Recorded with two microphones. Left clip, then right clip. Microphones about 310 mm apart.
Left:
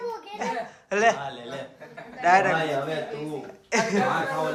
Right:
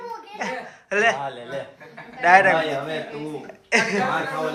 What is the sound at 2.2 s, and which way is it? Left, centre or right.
Speech, centre.